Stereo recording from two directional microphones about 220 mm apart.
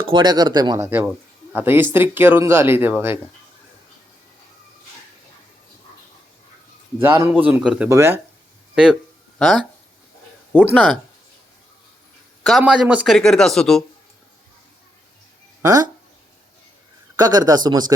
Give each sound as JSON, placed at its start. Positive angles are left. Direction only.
{"t": 0.0, "sound": "speech", "side_deg": -20}
{"t": 7.0, "sound": "speech", "side_deg": -10}
{"t": 10.8, "sound": "speech", "side_deg": 0}
{"t": 12.4, "sound": "speech", "side_deg": 0}
{"t": 15.6, "sound": "speech", "side_deg": -15}
{"t": 17.2, "sound": "speech", "side_deg": -15}